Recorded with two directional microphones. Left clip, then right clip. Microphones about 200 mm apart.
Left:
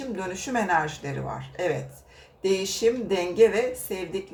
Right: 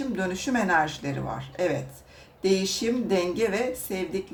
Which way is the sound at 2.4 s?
30° right (ahead or behind).